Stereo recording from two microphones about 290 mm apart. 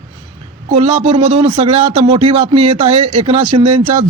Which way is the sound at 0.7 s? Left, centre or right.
Right.